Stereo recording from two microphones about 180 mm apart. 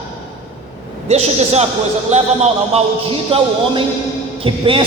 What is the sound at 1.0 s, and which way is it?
A man's voice, 35° right (ahead or behind).